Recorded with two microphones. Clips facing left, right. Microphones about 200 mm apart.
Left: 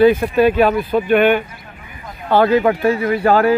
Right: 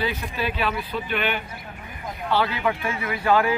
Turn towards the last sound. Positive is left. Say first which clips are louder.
# left 7 dB
turn(degrees=45)  # may be behind; listen again after turning